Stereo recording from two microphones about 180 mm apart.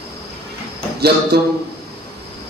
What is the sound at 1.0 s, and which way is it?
Speech, 60° right (ahead or behind).